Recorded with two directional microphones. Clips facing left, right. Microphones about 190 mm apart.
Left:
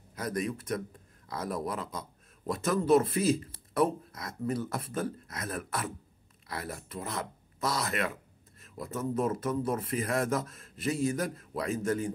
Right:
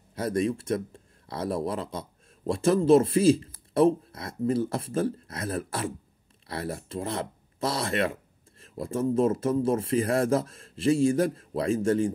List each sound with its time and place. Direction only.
0.1 s speech: 30° right (ahead or behind)